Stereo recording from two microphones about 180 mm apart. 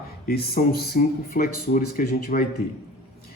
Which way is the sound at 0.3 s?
60° left (ahead or behind).